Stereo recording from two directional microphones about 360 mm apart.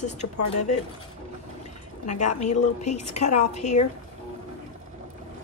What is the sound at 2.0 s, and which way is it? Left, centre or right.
A woman's voice, centre.